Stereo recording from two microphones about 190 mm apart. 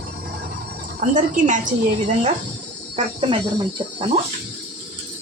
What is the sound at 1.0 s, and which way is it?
Speech, 40° right (ahead or behind).